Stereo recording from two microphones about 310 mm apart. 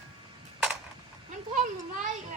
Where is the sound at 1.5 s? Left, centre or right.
Right.